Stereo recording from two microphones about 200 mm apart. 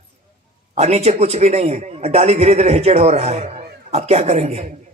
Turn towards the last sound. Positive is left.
turn(degrees=-35)  # may be behind; listen again after turning